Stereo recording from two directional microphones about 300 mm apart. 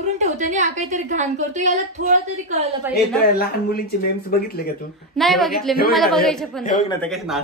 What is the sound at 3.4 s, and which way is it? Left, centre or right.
Speech, left.